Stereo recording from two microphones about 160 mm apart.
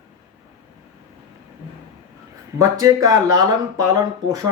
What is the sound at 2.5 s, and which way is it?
Speech, 20° right (ahead or behind).